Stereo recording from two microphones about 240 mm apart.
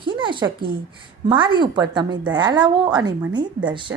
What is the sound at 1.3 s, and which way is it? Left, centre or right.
A woman's voice, centre.